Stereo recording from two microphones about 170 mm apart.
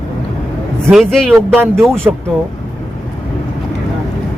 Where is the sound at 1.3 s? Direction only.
15° right (ahead or behind).